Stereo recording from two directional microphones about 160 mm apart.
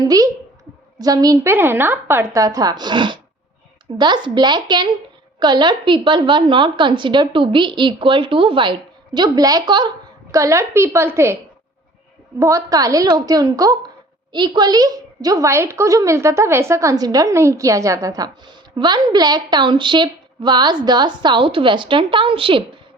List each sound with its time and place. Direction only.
0.0 s a woman's voice: 25° right (ahead or behind)
1.5 s a woman's voice: 15° right (ahead or behind)
12.4 s a woman's voice: 20° right (ahead or behind)